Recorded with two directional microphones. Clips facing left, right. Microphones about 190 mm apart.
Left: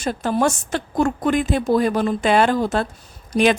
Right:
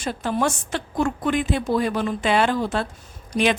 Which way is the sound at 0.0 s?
45° left (ahead or behind).